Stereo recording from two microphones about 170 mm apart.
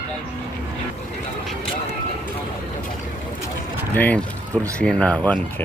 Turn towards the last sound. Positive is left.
turn(degrees=10)  # may be behind; listen again after turning